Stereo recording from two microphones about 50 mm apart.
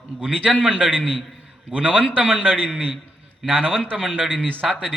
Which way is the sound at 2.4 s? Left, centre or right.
Centre.